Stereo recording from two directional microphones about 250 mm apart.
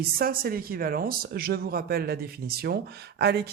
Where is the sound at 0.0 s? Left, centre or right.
Right.